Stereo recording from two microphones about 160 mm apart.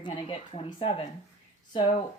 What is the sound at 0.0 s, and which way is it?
Speech, 35° left (ahead or behind).